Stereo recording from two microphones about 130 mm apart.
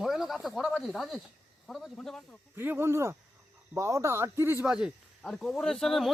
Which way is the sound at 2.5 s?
15° right (ahead or behind).